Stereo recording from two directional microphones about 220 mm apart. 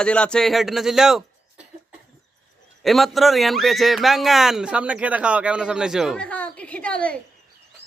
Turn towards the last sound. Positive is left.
turn(degrees=5)  # may be behind; listen again after turning